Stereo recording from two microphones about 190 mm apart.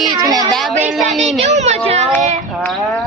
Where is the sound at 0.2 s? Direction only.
20° right (ahead or behind).